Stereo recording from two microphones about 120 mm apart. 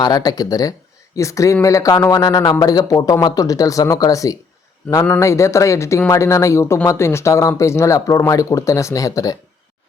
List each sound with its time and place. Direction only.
0.0 s a man's voice: 35° left (ahead or behind)